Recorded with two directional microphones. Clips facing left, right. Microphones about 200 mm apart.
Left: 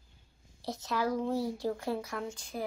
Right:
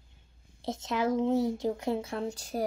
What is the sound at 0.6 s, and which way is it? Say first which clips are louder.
Speech: right 3 dB; 25° right (ahead or behind).